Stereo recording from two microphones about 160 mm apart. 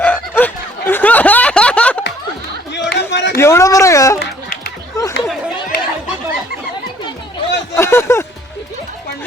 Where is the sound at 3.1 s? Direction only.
90° left.